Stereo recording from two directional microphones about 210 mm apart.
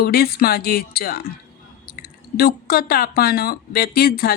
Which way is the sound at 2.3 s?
45° left (ahead or behind).